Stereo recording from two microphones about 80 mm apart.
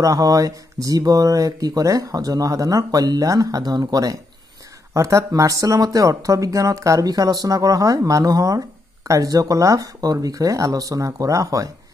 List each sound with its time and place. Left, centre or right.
0.0 s speech: right